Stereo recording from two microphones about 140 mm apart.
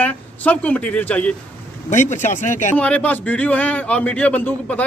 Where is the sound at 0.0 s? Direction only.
10° left (ahead or behind).